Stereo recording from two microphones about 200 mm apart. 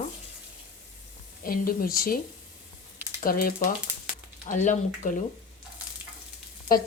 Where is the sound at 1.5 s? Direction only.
45° left (ahead or behind).